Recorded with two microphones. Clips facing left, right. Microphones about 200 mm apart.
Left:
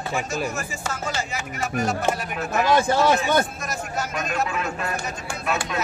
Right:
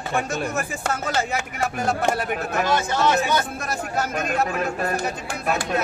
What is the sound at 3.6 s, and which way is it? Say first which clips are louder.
Speech: right 3 dB; 60° right (ahead or behind).